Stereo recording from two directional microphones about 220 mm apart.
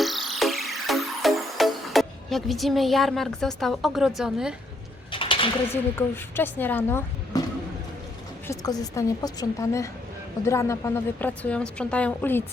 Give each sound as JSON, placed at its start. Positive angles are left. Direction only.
{"t": 0.0, "sound": "music", "side_deg": 0}
{"t": 5.1, "sound": "a sound", "side_deg": 25}
{"t": 5.7, "sound": "a woman's voice", "side_deg": 10}
{"t": 8.4, "sound": "a woman's voice", "side_deg": 15}